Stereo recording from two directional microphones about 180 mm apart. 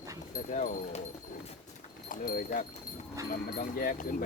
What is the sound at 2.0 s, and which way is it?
Speech, 45° left (ahead or behind).